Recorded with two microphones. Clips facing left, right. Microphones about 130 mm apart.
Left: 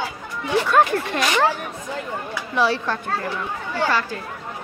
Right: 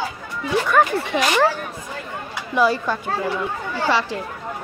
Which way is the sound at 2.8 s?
10° right (ahead or behind).